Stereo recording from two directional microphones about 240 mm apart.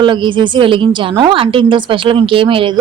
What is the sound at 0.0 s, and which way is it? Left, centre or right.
A woman's voice, centre.